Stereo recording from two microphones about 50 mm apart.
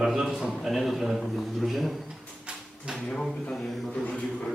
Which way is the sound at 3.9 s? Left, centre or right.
Centre.